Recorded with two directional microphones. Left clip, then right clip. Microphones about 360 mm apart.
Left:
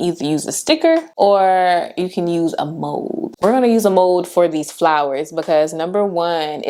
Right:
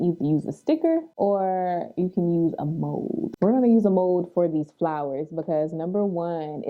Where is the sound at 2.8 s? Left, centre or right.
Centre.